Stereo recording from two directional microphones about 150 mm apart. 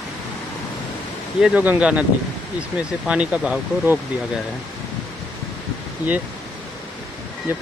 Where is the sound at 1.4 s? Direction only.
10° right (ahead or behind).